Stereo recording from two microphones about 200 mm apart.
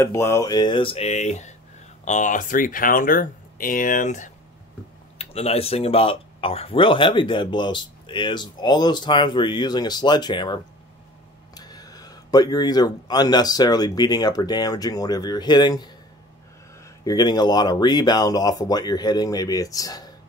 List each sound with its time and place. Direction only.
0.0 s speech: 15° left (ahead or behind)
17.0 s speech: 20° left (ahead or behind)